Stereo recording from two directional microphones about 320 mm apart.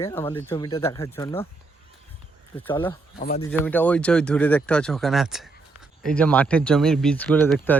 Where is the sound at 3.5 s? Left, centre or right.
Centre.